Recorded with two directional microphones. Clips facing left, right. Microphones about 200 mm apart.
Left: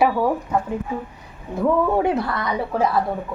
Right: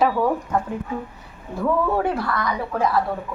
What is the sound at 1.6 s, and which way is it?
Speech, 20° left (ahead or behind).